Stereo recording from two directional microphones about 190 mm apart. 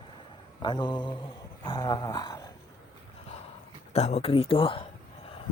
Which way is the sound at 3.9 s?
35° left (ahead or behind).